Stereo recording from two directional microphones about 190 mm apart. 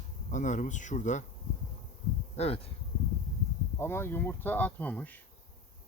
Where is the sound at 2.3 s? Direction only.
35° left (ahead or behind).